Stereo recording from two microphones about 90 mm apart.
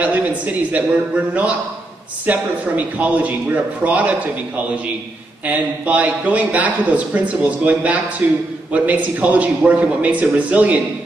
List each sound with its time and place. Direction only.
0.0 s speech: 15° right (ahead or behind)
2.2 s speech: 15° right (ahead or behind)
5.5 s a man's voice: 20° right (ahead or behind)